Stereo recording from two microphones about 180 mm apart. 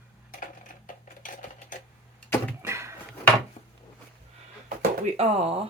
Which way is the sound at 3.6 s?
40° left (ahead or behind).